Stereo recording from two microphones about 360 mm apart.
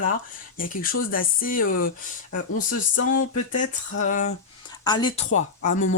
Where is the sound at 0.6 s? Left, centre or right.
Left.